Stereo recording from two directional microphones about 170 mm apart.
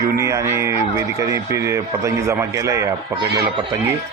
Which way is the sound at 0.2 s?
15° right (ahead or behind).